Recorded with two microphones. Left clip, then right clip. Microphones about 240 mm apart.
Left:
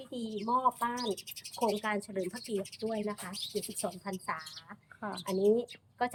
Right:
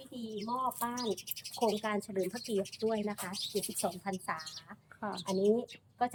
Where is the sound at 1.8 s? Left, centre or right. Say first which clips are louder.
Left 1 dB; centre.